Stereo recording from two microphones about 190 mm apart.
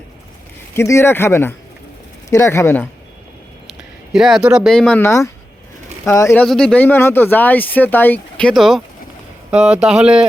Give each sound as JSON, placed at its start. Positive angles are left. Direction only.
{"t": 0.8, "sound": "speech", "side_deg": 15}
{"t": 4.1, "sound": "speech", "side_deg": 0}
{"t": 6.4, "sound": "speech", "side_deg": 5}